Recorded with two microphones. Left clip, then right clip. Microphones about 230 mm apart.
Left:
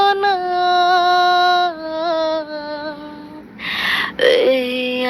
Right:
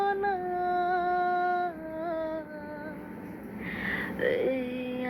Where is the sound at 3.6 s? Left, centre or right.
Left.